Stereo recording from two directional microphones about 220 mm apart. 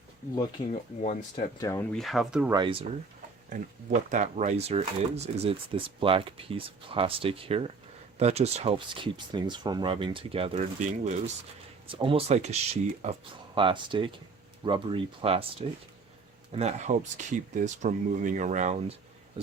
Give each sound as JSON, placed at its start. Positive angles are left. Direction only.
{"t": 0.7, "sound": "speech", "side_deg": 30}
{"t": 1.5, "sound": "speech", "side_deg": 15}
{"t": 2.5, "sound": "speech", "side_deg": -20}
{"t": 4.1, "sound": "speech", "side_deg": -35}
{"t": 16.5, "sound": "speech", "side_deg": -30}